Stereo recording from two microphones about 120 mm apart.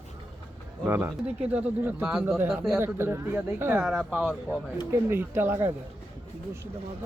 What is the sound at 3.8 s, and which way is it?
Speech, 5° right (ahead or behind).